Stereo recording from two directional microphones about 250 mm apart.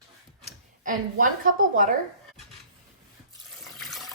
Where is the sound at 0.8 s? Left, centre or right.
Right.